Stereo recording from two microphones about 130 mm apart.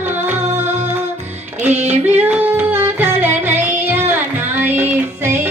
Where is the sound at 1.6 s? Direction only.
60° right (ahead or behind).